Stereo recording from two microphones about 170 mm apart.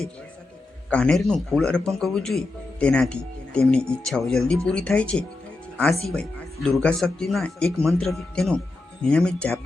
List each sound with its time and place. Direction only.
0.9 s speech: 5° left (ahead or behind)